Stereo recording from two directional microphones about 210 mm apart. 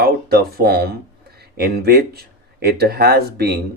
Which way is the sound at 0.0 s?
45° right (ahead or behind).